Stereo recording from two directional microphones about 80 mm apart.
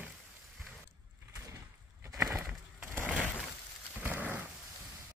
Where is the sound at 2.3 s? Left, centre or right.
Right.